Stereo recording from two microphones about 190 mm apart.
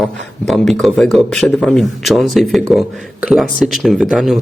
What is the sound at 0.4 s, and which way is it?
A man's voice, centre (ahead or behind).